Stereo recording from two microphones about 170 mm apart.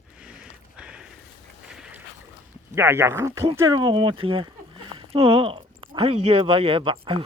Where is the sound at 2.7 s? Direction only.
15° right (ahead or behind).